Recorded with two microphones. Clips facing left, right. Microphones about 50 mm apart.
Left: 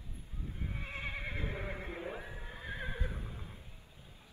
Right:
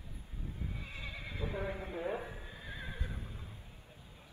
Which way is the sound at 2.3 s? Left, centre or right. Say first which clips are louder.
Left 1 dB; left.